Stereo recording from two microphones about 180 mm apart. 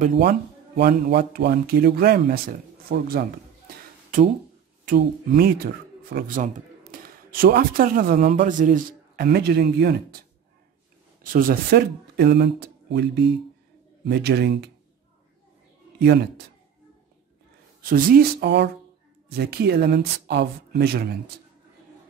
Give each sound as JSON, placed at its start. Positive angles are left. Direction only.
{"t": 0.1, "sound": "speech", "side_deg": -65}
{"t": 4.8, "sound": "speech", "side_deg": -55}
{"t": 11.3, "sound": "a man's voice", "side_deg": -55}
{"t": 16.0, "sound": "speech", "side_deg": -65}
{"t": 17.8, "sound": "speech", "side_deg": -55}